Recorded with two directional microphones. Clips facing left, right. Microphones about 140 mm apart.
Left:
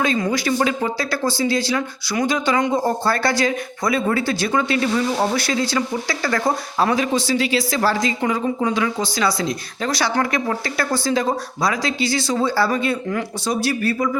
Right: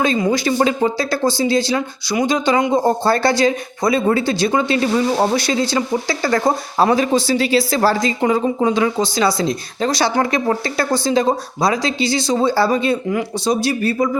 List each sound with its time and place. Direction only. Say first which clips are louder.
0.3 s speech: right 3 dB; 25° right (ahead or behind)